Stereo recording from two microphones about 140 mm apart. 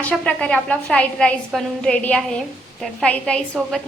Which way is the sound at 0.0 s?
10° left (ahead or behind).